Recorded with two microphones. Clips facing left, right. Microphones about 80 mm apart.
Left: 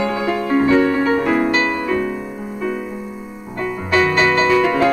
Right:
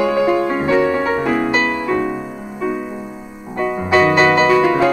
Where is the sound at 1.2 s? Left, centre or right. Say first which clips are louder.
Even; centre; by 4.9 s right.